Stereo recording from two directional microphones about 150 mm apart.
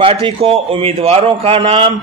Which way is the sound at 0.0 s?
40° right (ahead or behind).